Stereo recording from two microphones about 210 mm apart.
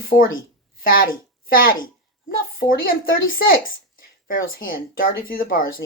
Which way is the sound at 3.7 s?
45° left (ahead or behind).